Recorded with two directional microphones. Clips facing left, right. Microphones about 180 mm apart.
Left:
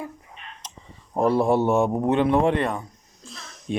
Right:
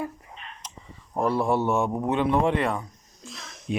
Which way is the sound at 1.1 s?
25° left (ahead or behind).